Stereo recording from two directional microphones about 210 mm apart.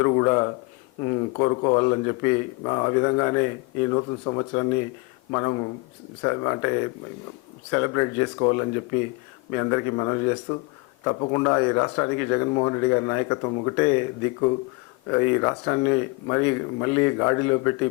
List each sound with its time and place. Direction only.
0.0 s speech: 15° left (ahead or behind)
13.7 s speech: 15° left (ahead or behind)
15.1 s speech: 15° left (ahead or behind)